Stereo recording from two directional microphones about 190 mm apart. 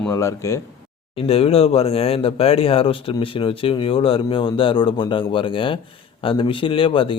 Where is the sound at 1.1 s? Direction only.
30° left (ahead or behind).